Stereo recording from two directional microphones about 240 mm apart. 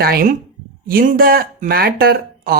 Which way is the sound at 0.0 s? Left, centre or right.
Right.